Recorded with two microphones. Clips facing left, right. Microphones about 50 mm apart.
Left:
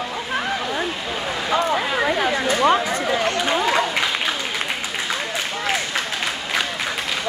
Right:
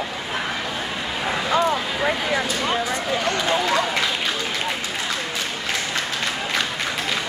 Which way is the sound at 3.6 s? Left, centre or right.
Centre.